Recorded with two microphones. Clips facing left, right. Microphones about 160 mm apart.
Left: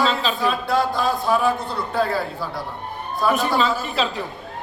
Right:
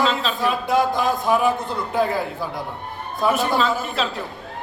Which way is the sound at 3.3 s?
Centre (ahead or behind).